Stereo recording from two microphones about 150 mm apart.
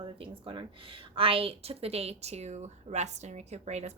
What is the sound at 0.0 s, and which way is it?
Speech, 35° right (ahead or behind).